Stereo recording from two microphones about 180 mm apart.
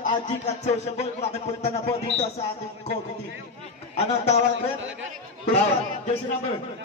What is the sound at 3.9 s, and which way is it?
Speech, 35° left (ahead or behind).